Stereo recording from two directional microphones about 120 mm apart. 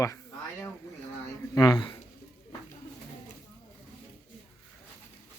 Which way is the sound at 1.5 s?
35° left (ahead or behind).